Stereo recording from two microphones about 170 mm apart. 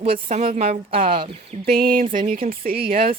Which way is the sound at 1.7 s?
55° right (ahead or behind).